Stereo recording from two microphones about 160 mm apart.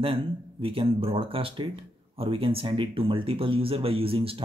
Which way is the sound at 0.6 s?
35° right (ahead or behind).